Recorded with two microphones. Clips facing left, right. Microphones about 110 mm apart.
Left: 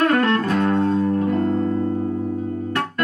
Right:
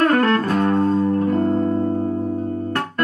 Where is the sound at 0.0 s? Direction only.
40° right (ahead or behind).